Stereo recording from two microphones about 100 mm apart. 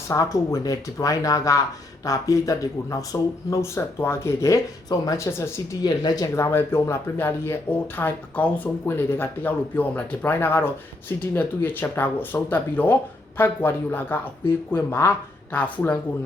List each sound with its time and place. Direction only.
0.1 s speech: 35° left (ahead or behind)
5.8 s speech: 40° left (ahead or behind)
6.3 s speech: 25° left (ahead or behind)